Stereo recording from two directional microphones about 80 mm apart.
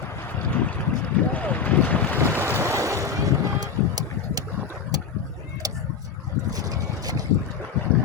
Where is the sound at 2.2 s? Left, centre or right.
Right.